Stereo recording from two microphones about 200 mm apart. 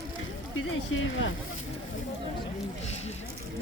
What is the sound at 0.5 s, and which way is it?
Speech, 80° left.